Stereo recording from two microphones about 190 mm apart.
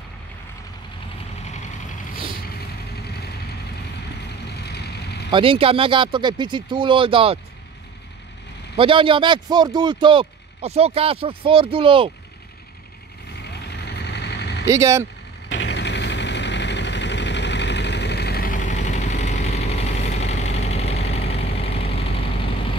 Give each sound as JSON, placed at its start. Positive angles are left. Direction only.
{"t": 3.0, "sound": "vehicle", "side_deg": 55}
{"t": 4.5, "sound": "vehicle", "side_deg": 60}
{"t": 5.3, "sound": "speech", "side_deg": -30}
{"t": 8.7, "sound": "speech", "side_deg": -25}
{"t": 13.4, "sound": "vehicle", "side_deg": 60}
{"t": 14.7, "sound": "speech", "side_deg": -15}
{"t": 15.5, "sound": "vehicle", "side_deg": 65}